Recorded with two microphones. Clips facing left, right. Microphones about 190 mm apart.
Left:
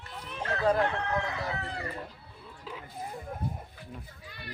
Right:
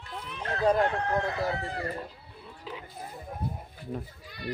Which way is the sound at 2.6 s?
Centre (ahead or behind).